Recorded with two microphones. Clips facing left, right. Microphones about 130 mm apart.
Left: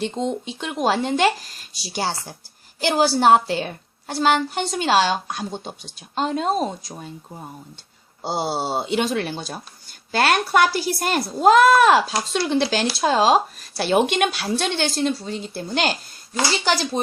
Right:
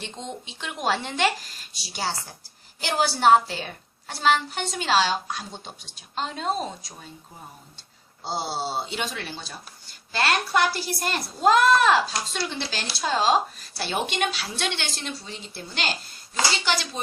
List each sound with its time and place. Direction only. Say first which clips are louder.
0.0 s a woman's voice: left 11 dB; 45° left (ahead or behind)
8.2 s a woman's voice: left 5 dB; 55° left (ahead or behind)